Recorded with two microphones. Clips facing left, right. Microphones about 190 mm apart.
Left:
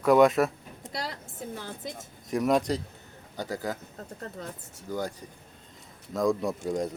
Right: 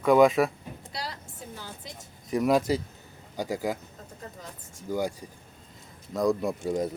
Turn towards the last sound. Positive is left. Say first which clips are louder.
# right 1 dB
turn(degrees=0)  # may be behind; listen again after turning